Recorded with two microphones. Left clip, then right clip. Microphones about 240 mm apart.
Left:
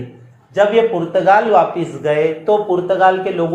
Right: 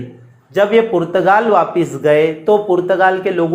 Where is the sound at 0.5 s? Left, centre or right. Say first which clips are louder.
Right 1 dB; right.